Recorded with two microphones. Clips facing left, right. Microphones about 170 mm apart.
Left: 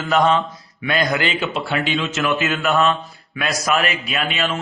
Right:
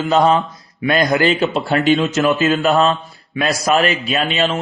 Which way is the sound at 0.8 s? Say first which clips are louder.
Right 6 dB; 40° right (ahead or behind).